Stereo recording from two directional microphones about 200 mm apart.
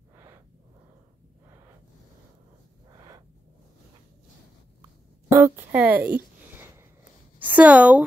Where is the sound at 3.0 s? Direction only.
20° right (ahead or behind).